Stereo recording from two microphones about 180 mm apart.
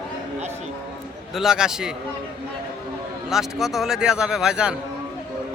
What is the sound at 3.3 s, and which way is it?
Speech, centre (ahead or behind).